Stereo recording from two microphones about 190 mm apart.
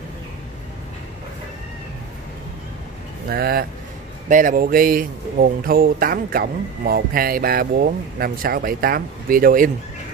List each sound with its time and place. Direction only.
3.3 s speech: 50° right (ahead or behind)